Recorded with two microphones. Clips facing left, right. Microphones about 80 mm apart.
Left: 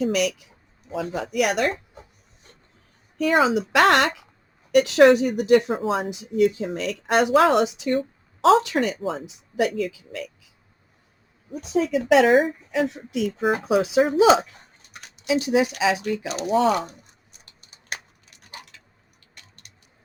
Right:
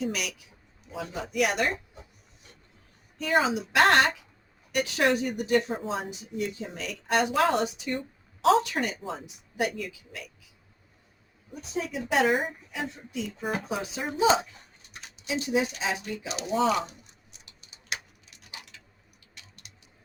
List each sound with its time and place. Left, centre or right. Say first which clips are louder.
0.0 s speech: left 9 dB; left
1.1 s speech: left 4 dB; left
3.2 s speech: left 6 dB; left
11.6 s speech: left 10 dB; left
16.5 s speech: left 5 dB; left
17.4 s tick-tock: left 2 dB; left
19.3 s a sound: left 1 dB; left